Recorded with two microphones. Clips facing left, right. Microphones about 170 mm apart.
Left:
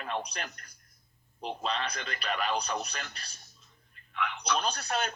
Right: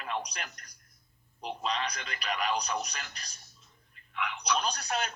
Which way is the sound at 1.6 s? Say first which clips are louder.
Even; 55° left (ahead or behind).